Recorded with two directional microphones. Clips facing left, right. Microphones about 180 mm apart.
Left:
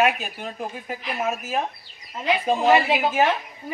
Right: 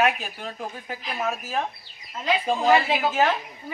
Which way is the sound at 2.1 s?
15° left (ahead or behind).